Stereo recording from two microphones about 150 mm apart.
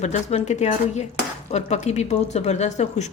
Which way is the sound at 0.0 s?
45° left (ahead or behind).